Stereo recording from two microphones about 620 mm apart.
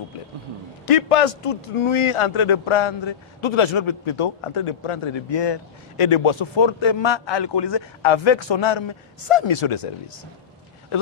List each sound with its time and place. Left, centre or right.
0.8 s a man's voice: left